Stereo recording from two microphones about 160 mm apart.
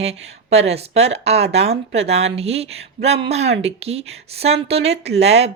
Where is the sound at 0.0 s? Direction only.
40° right (ahead or behind).